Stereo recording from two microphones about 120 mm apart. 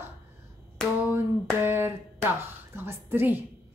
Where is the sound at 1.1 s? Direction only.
20° right (ahead or behind).